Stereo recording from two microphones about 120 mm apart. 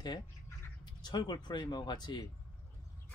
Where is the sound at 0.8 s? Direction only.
40° left (ahead or behind).